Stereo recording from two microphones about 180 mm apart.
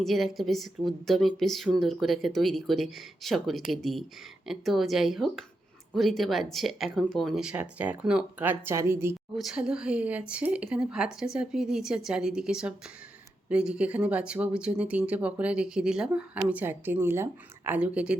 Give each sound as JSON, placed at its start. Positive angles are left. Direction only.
{"t": 0.0, "sound": "a woman's voice", "side_deg": 0}
{"t": 9.3, "sound": "a woman's voice", "side_deg": 0}